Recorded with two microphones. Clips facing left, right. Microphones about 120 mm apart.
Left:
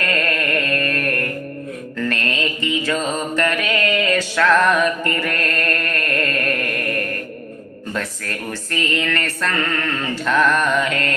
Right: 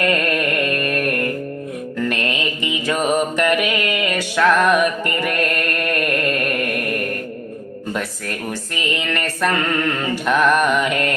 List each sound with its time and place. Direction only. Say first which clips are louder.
0.0 s music: right 3 dB; 20° right (ahead or behind)
2.0 s mantra: left 1 dB; 15° right (ahead or behind)
7.9 s speech: left 1 dB; 15° right (ahead or behind)